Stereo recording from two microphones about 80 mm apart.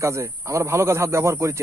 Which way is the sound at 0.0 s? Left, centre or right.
Right.